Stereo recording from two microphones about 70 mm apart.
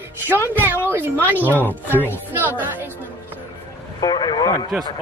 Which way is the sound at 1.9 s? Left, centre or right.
Right.